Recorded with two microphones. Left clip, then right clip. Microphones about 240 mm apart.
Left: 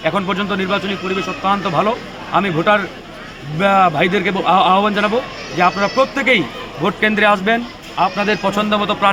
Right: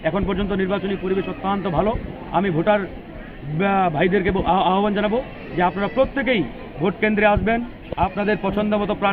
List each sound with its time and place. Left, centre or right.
0.0 s a man's voice: left